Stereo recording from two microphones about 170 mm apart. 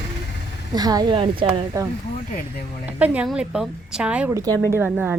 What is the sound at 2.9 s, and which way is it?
A woman's voice, 10° right (ahead or behind).